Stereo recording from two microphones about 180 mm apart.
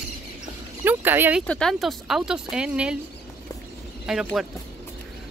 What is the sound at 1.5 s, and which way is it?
Speech, 5° left (ahead or behind).